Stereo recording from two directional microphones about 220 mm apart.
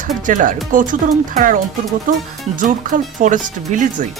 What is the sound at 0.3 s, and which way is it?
Speech, 35° right (ahead or behind).